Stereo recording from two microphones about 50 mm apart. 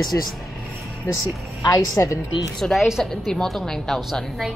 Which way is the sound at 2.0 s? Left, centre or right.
Left.